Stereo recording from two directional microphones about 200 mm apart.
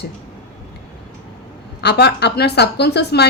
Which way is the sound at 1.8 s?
55° left (ahead or behind).